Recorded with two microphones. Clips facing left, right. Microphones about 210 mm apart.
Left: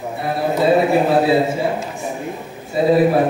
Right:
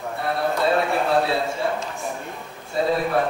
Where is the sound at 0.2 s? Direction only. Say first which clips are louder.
Left 5 dB; 5° left (ahead or behind).